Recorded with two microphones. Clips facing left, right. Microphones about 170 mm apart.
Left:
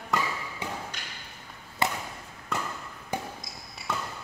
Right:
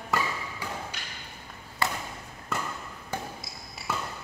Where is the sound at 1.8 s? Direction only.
20° left (ahead or behind).